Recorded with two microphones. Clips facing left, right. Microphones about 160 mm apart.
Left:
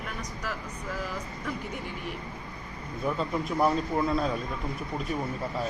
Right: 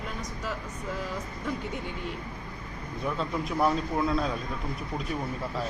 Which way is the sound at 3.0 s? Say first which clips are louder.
Left 2 dB; centre (ahead or behind).